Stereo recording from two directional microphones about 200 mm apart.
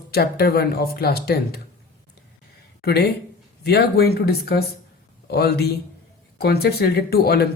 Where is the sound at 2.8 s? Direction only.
55° left (ahead or behind).